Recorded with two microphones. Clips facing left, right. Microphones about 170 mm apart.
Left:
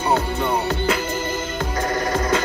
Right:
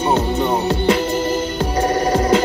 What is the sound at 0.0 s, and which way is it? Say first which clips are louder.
Music: right 4 dB; 20° right (ahead or behind).